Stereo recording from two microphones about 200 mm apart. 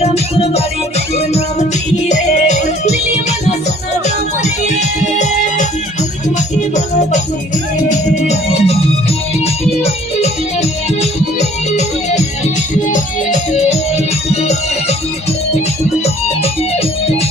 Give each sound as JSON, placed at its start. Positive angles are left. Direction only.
{"t": 0.0, "sound": "music", "side_deg": 30}
{"t": 7.9, "sound": "organ", "side_deg": 30}
{"t": 9.8, "sound": "music", "side_deg": 30}
{"t": 16.0, "sound": "music", "side_deg": 30}